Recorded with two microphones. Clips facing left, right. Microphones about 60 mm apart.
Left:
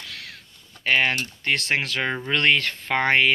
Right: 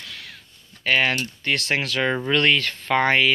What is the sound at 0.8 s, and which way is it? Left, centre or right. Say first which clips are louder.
Speech: right 1 dB; left.